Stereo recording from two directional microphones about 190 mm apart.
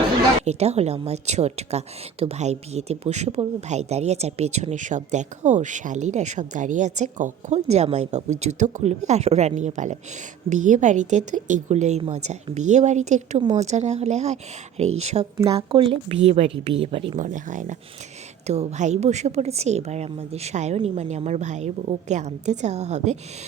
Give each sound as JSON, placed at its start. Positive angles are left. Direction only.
{"t": 0.4, "sound": "a woman's voice", "side_deg": -35}
{"t": 17.2, "sound": "a woman's voice", "side_deg": -40}